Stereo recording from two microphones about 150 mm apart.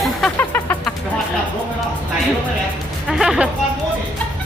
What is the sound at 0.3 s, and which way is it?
Music, 15° left (ahead or behind).